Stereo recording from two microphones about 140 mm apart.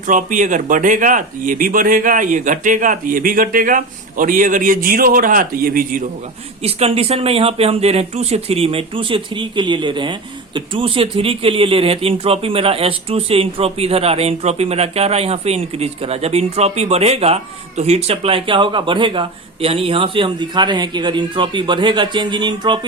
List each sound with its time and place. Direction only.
0.1 s speech: 65° right (ahead or behind); by 6.1 s 90° right
6.6 s speech: 45° right (ahead or behind)